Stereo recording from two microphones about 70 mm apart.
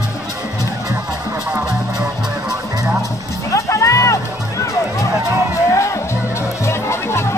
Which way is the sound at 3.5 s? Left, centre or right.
Left.